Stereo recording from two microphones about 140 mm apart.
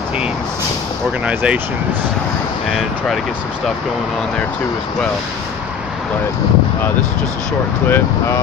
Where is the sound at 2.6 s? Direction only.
Centre (ahead or behind).